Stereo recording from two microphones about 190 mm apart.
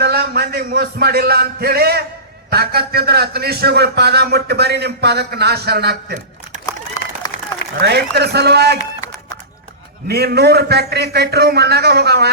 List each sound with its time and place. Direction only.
0.0 s music: 55° right (ahead or behind)
2.5 s a man's voice: 55° right (ahead or behind)
7.8 s a man's voice: 60° right (ahead or behind)
10.1 s a man's voice: 55° right (ahead or behind)